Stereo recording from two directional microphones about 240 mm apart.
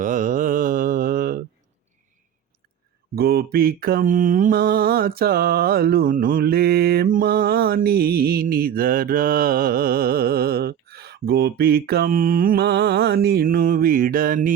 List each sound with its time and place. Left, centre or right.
0.0 s mantra: right
3.2 s mantra: right